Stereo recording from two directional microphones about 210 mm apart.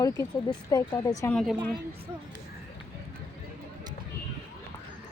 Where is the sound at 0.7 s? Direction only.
15° left (ahead or behind).